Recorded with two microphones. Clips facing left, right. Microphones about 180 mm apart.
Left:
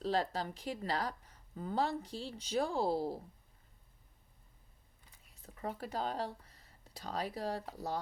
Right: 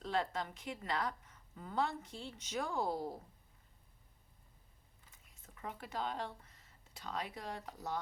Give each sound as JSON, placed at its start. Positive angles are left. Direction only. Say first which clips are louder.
{"t": 0.0, "sound": "a woman's voice", "louder": "left 3 dB", "side_deg": 35}
{"t": 5.1, "sound": "speech", "louder": "left 5 dB", "side_deg": 35}